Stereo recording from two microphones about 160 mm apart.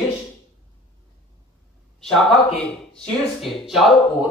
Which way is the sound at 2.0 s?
Centre (ahead or behind).